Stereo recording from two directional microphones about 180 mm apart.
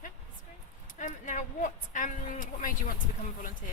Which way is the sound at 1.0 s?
45° left (ahead or behind).